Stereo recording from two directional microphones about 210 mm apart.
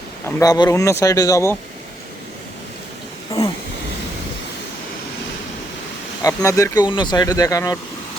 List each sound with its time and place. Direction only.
0.3 s speech: 15° left (ahead or behind)
3.3 s a sound: 15° left (ahead or behind)
6.2 s speech: 15° left (ahead or behind)